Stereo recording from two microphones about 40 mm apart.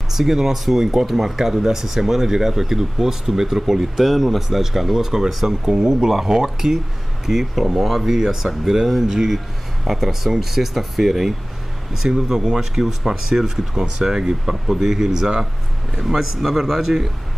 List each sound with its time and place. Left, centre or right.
0.1 s a man's voice: centre
16.0 s a man's voice: centre